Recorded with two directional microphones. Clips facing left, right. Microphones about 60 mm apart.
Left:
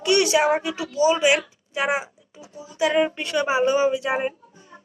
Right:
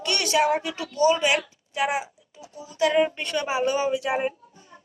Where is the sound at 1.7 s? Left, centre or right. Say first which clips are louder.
Left 2 dB; left; by 3.1 s centre.